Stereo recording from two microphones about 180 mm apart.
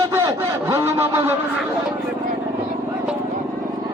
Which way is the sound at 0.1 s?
15° right (ahead or behind).